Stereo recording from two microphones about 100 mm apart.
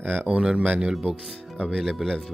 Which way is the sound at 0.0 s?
15° right (ahead or behind).